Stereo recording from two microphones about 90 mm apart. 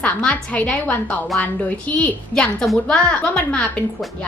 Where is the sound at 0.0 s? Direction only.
15° left (ahead or behind).